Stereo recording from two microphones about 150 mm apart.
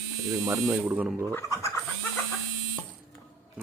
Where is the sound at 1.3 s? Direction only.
20° left (ahead or behind).